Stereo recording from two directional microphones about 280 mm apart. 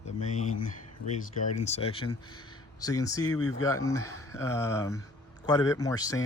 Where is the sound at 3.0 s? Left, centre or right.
Centre.